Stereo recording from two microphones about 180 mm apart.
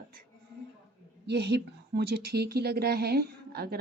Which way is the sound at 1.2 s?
70° right (ahead or behind).